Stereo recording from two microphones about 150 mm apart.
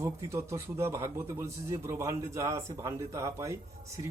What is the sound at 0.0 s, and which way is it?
A man's voice, 20° right (ahead or behind).